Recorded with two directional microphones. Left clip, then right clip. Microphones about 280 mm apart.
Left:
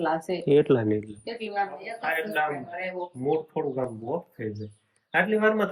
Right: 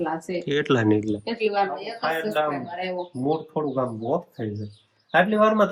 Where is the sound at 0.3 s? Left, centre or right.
Centre.